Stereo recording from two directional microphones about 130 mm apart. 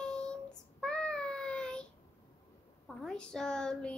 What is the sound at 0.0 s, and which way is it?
Child singing, 5° left (ahead or behind).